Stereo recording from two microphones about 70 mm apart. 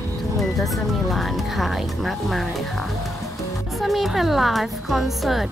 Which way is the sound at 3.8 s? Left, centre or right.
Centre.